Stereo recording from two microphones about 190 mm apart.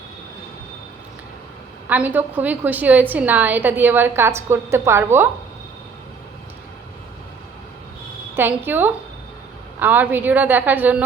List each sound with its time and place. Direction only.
1.9 s a woman's voice: 10° right (ahead or behind)
8.4 s a woman's voice: 10° right (ahead or behind)